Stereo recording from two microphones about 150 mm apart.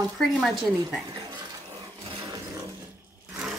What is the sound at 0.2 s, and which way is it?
Speech, centre (ahead or behind).